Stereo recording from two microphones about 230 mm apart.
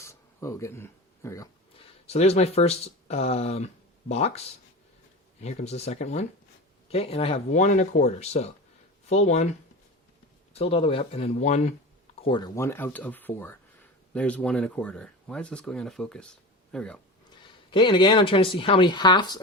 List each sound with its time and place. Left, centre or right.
0.0 s a sound: centre
2.0 s speech: left
5.4 s speech: left
10.5 s speech: left
12.2 s speech: centre
17.7 s speech: centre